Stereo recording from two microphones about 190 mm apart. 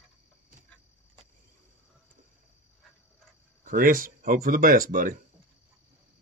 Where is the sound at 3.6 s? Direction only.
50° right (ahead or behind).